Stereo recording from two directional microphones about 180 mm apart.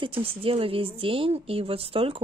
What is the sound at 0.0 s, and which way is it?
A woman's voice, 30° right (ahead or behind).